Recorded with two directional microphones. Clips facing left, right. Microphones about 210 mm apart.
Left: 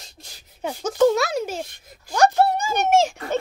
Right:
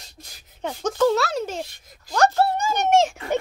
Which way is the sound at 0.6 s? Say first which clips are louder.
Left 3 dB; 10° left (ahead or behind).